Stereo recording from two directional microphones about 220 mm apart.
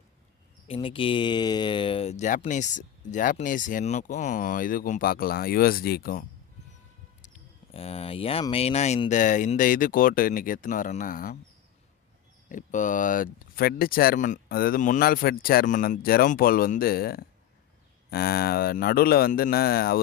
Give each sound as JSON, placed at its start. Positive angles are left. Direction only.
{"t": 0.7, "sound": "speech", "side_deg": 25}
{"t": 7.7, "sound": "speech", "side_deg": 25}
{"t": 12.5, "sound": "speech", "side_deg": 35}